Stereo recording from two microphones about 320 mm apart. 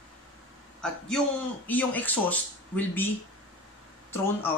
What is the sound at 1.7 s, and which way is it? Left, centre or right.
Speech, centre.